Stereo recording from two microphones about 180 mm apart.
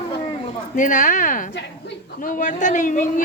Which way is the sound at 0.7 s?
45° left (ahead or behind).